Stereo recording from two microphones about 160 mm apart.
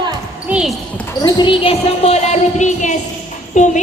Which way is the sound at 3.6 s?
50° left (ahead or behind).